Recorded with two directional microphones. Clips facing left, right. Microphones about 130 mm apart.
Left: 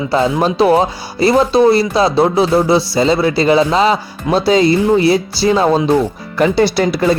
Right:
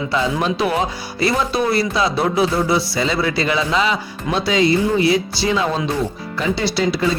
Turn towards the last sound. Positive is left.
turn(degrees=50)  # may be behind; listen again after turning